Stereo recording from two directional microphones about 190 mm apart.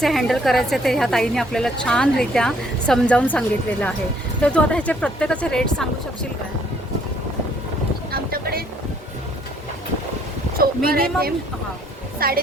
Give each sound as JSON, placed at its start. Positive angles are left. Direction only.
{"t": 0.0, "sound": "a woman's voice", "side_deg": 0}
{"t": 8.1, "sound": "vehicle", "side_deg": -55}
{"t": 10.8, "sound": "speech", "side_deg": -50}